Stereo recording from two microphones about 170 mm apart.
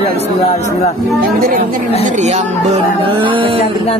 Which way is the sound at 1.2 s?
60° right (ahead or behind).